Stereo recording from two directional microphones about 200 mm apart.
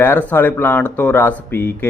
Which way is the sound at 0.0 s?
10° left (ahead or behind).